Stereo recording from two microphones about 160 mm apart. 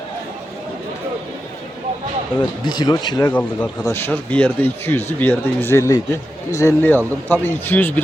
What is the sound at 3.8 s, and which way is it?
Speech, 15° left (ahead or behind).